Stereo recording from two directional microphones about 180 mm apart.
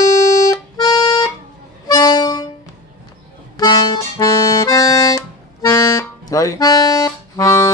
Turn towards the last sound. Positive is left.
turn(degrees=15)  # may be behind; listen again after turning